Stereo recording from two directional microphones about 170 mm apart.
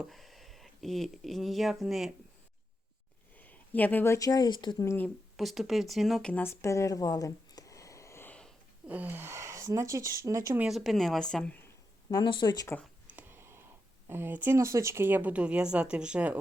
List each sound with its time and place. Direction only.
0.0 s speech: centre (ahead or behind)
3.3 s speech: 10° left (ahead or behind)
5.4 s speech: centre (ahead or behind)
8.9 s speech: 10° right (ahead or behind)
10.7 s speech: centre (ahead or behind)
12.1 s speech: 25° left (ahead or behind)
12.8 s a sound: 10° right (ahead or behind)
14.1 s speech: 10° right (ahead or behind)